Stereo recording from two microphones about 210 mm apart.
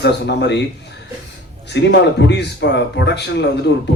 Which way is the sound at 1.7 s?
55° left (ahead or behind).